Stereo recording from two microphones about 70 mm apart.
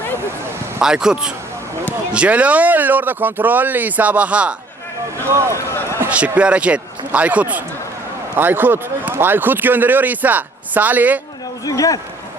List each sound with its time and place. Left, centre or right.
0.8 s speech: centre
5.2 s speech: right
6.1 s speech: centre
11.6 s speech: left